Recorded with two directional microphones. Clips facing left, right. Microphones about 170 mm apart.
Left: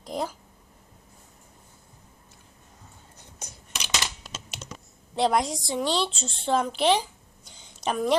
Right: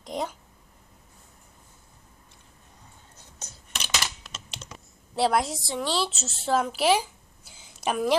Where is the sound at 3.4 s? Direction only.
15° left (ahead or behind).